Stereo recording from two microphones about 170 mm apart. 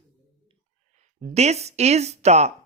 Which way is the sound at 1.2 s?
40° right (ahead or behind).